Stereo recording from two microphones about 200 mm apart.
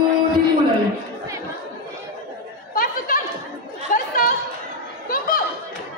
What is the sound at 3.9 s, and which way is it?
Chatter, 45° left (ahead or behind).